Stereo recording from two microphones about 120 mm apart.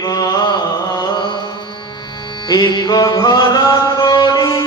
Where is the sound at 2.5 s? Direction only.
40° left (ahead or behind).